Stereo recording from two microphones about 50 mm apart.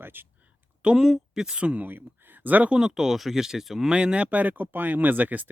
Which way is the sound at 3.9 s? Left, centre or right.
Right.